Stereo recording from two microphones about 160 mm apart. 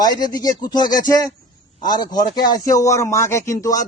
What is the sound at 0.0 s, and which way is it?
Speech, 25° left (ahead or behind).